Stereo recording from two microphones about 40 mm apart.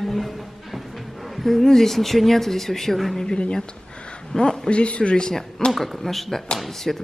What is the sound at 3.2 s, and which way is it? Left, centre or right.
A man's voice, left.